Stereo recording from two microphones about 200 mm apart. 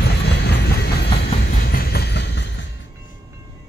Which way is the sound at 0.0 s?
55° left (ahead or behind).